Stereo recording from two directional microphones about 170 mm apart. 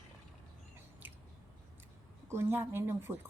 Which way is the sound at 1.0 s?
10° right (ahead or behind).